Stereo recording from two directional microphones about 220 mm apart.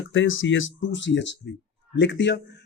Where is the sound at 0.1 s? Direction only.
60° left (ahead or behind).